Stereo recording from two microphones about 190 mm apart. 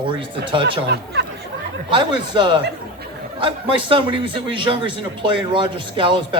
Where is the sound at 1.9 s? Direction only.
25° right (ahead or behind).